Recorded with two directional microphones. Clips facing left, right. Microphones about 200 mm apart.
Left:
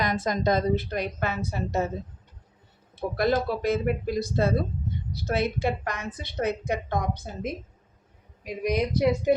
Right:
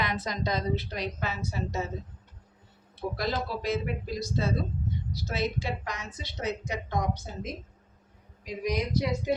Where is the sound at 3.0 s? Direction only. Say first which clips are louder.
Left 6 dB; 50° left (ahead or behind).